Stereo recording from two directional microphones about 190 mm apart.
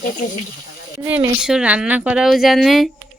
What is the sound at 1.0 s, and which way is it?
A woman's voice, 10° right (ahead or behind).